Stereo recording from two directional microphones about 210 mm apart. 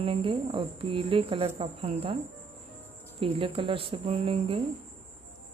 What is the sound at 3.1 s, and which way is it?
Speech, 25° right (ahead or behind).